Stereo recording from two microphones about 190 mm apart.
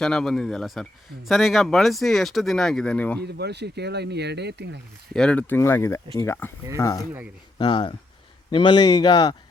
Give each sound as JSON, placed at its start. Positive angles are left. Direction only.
{"t": 0.0, "sound": "speech", "side_deg": 5}
{"t": 3.2, "sound": "speech", "side_deg": -60}
{"t": 5.1, "sound": "speech", "side_deg": 5}